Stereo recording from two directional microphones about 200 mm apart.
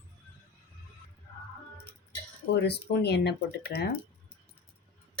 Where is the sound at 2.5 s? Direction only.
55° left (ahead or behind).